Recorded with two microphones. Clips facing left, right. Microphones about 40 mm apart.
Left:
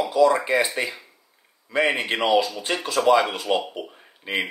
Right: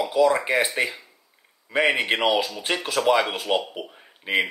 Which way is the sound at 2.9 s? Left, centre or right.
Centre.